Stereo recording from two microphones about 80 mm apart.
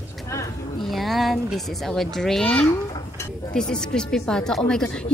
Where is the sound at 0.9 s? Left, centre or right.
Centre.